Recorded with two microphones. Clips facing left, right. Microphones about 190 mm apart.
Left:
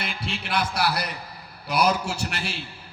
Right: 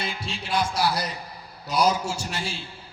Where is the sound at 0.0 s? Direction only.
65° left (ahead or behind).